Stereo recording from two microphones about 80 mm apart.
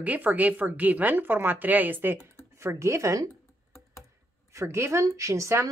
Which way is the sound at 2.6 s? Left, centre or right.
Right.